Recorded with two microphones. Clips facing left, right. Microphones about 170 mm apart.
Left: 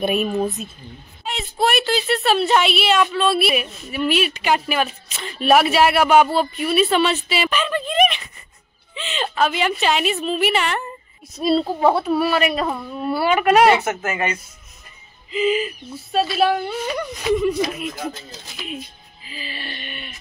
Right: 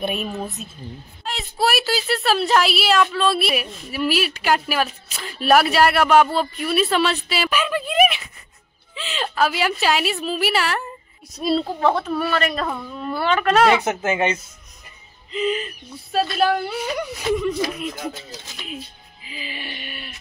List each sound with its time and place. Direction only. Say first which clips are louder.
0.0 s a woman's voice: left 6 dB; 5° left (ahead or behind)
13.8 s speech: right 2 dB; 20° right (ahead or behind)
15.3 s speech: left 4 dB; 5° left (ahead or behind)
19.2 s a sound: even; 15° right (ahead or behind)